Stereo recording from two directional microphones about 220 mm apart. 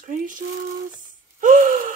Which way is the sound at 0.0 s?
35° right (ahead or behind).